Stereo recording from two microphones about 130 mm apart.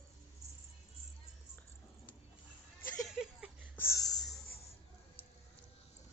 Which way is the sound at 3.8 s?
25° left (ahead or behind).